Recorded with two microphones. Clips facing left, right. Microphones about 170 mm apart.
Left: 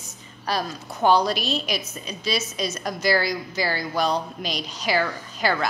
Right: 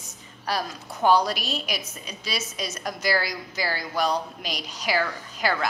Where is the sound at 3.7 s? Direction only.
25° left (ahead or behind).